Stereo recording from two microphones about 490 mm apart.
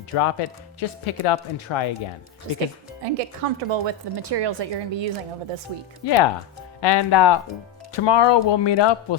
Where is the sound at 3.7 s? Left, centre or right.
Right.